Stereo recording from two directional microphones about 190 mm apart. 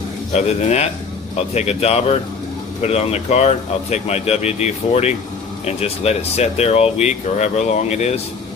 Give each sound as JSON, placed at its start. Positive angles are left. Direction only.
{"t": 0.3, "sound": "speech", "side_deg": 35}